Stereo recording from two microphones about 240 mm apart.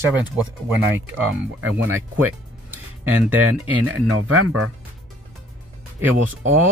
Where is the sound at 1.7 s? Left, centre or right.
Right.